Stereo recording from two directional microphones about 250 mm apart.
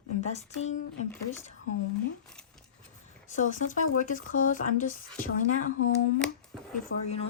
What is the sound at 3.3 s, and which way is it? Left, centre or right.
Speech, left.